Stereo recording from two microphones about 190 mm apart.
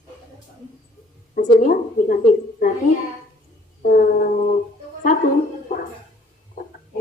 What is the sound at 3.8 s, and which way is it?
Speech, 45° left (ahead or behind).